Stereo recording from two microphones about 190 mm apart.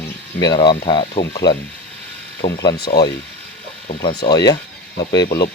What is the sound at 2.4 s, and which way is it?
Speech, 25° left (ahead or behind).